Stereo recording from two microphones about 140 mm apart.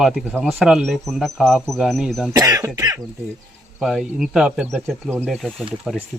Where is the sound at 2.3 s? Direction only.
25° right (ahead or behind).